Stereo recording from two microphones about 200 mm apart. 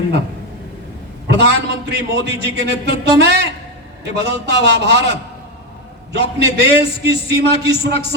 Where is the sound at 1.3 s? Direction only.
55° right (ahead or behind).